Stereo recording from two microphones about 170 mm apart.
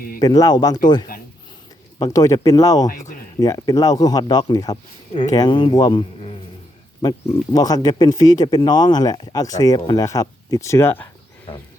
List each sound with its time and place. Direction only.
0.2 s speech: 20° left (ahead or behind)
2.0 s speech: 20° left (ahead or behind)